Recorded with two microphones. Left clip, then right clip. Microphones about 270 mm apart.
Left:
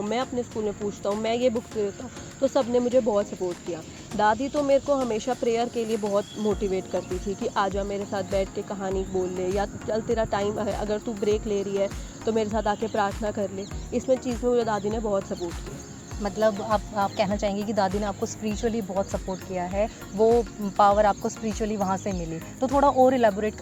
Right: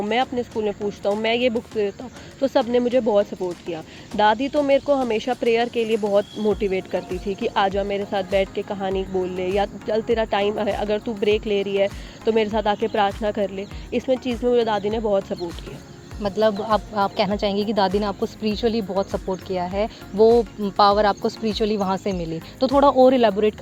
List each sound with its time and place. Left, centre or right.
0.1 s speech: right